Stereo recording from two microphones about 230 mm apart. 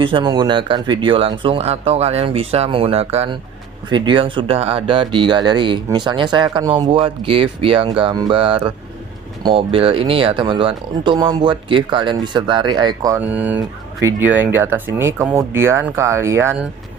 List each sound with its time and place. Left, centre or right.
0.0 s speech: right